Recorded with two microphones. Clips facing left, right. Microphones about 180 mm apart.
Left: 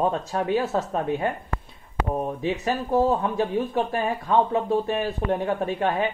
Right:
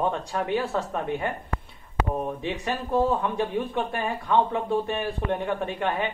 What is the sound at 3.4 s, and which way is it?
Speech, 35° left (ahead or behind).